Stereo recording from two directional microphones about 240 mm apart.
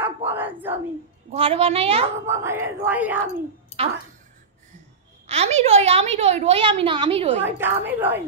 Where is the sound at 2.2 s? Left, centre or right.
Centre.